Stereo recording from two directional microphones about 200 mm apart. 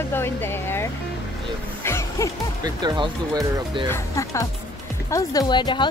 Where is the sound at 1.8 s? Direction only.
15° left (ahead or behind).